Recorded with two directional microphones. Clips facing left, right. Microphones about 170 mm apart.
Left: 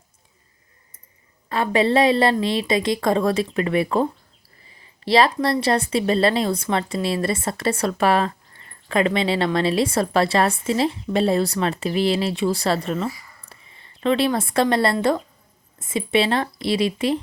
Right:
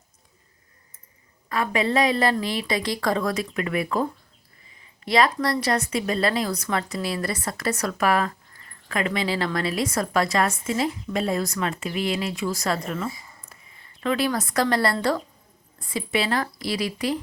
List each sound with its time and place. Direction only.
1.5 s a woman's voice: 30° left (ahead or behind)